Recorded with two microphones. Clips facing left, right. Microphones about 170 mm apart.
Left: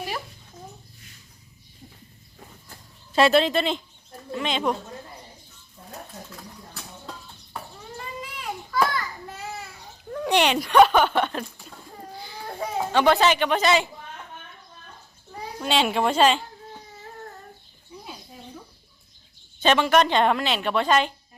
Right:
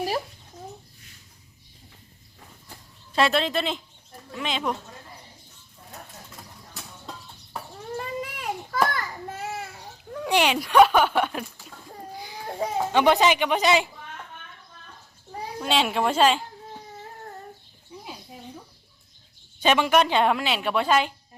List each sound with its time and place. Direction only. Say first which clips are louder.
3.2 s a woman's voice: left 4 dB; centre (ahead or behind)
7.9 s a sound: right 5 dB; 50° right (ahead or behind)
10.1 s a child's voice: left 1 dB; 5° right (ahead or behind)
15.6 s a woman's voice: left 1 dB; centre (ahead or behind)
19.5 s speech: left 1 dB; 10° right (ahead or behind)